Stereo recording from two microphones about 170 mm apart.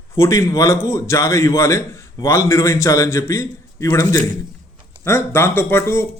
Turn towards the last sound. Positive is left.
turn(degrees=15)  # may be behind; listen again after turning